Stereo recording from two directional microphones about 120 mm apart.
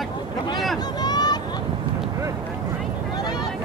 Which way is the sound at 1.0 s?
35° left (ahead or behind).